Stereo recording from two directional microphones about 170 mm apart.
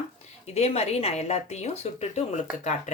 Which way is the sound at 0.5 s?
35° left (ahead or behind).